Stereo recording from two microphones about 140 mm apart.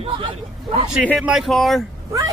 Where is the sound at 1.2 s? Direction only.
5° right (ahead or behind).